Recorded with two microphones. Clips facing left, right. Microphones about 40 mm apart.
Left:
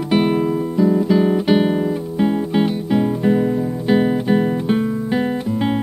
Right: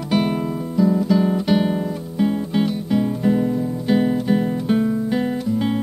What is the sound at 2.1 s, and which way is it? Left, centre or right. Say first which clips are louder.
Music: left 1 dB; centre.